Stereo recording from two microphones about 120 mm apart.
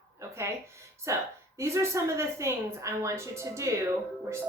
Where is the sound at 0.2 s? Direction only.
25° right (ahead or behind).